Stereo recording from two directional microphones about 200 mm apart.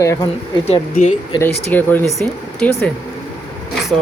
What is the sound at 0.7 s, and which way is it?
Speech, 30° left (ahead or behind).